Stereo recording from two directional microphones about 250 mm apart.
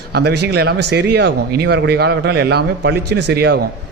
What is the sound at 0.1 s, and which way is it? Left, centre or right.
A man's voice, right.